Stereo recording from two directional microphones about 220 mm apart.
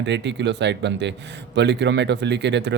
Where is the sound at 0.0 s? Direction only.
50° right (ahead or behind).